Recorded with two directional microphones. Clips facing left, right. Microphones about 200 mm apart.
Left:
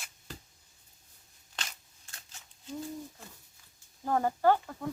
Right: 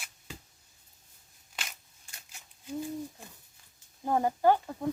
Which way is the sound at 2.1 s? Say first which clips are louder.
Even; 15° right (ahead or behind).